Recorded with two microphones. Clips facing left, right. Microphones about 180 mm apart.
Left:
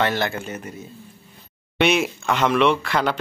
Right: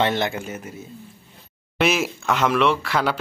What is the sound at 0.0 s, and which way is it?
Speech, 20° right (ahead or behind).